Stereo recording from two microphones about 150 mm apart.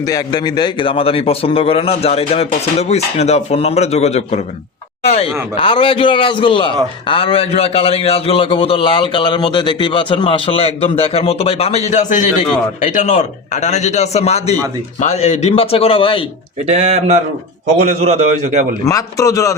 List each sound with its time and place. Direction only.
0.1 s a man's voice: 30° left (ahead or behind)
16.6 s a man's voice: 45° right (ahead or behind)
18.9 s a man's voice: 20° left (ahead or behind)